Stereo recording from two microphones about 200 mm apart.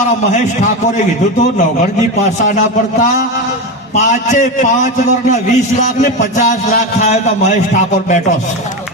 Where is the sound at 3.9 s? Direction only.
35° left (ahead or behind).